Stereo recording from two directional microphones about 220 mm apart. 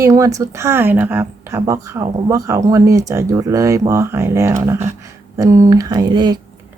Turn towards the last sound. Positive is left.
turn(degrees=-20)  # may be behind; listen again after turning